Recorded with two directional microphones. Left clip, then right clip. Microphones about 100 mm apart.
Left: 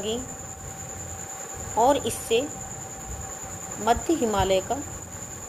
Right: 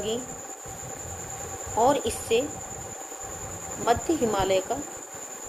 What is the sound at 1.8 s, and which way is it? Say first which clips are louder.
Speech: left 1 dB; 90° left.